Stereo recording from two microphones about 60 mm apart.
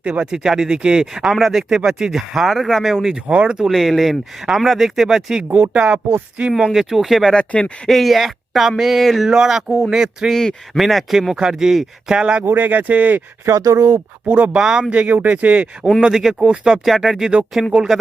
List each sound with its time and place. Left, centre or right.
0.0 s speech: centre
3.2 s speech: right
3.7 s speech: centre
5.7 s speech: right
6.7 s speech: centre
7.3 s speech: centre
7.9 s speech: centre
12.5 s speech: right
13.5 s speech: right
14.3 s speech: right
14.5 s speech: centre
16.7 s speech: centre